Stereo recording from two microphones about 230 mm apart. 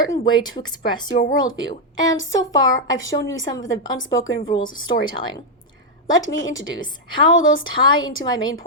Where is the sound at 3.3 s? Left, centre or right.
Centre.